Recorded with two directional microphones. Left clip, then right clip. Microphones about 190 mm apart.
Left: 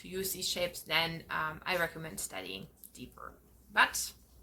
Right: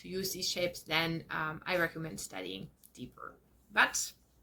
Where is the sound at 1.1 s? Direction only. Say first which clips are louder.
Left 1 dB; 15° left (ahead or behind).